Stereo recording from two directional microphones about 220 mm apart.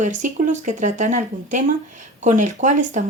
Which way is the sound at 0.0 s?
35° right (ahead or behind).